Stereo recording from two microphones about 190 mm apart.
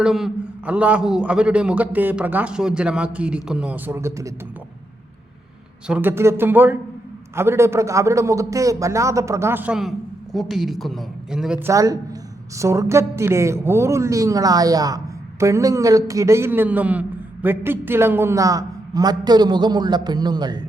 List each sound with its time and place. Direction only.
0.0 s a woman's voice: 5° right (ahead or behind)
5.9 s a woman's voice: 10° right (ahead or behind)
11.7 s a woman's voice: 15° right (ahead or behind)